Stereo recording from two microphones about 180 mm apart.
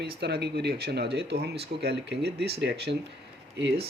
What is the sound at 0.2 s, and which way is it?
Speech, 65° right (ahead or behind).